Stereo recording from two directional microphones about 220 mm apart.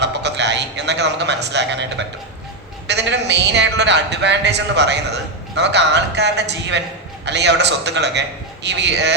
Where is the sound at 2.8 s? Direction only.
50° right (ahead or behind).